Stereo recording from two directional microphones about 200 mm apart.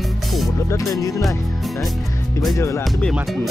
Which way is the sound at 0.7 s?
15° left (ahead or behind).